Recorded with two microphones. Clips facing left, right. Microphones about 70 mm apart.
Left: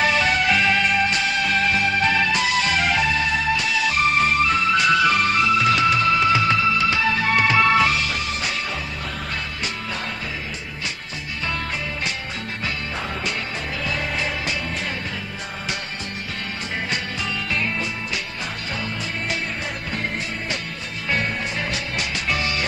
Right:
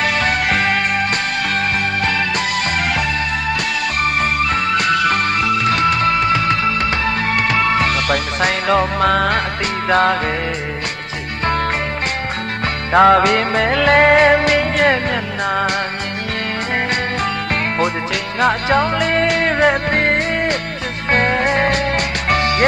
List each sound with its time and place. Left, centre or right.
0.0 s music: right
4.0 s music: right
9.9 s music: right
12.9 s music: right
17.5 s music: right